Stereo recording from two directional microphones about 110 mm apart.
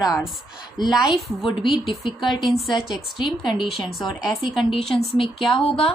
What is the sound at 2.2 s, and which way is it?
Speech, 40° left (ahead or behind).